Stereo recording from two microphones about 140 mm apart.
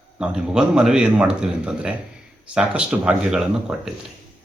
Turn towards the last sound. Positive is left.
turn(degrees=-5)  # may be behind; listen again after turning